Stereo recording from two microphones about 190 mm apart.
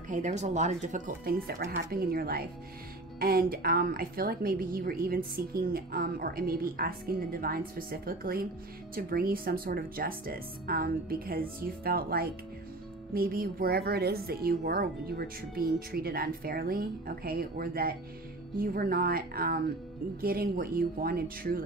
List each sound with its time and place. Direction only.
0.1 s a woman's voice: 40° right (ahead or behind)